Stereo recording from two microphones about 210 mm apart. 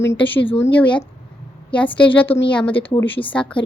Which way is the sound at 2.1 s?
10° left (ahead or behind).